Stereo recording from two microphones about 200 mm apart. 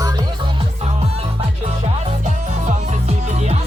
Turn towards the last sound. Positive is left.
turn(degrees=-30)  # may be behind; listen again after turning